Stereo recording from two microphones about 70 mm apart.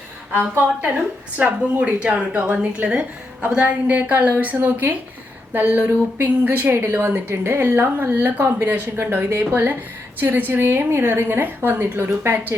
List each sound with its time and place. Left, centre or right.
1.4 s a woman's voice: centre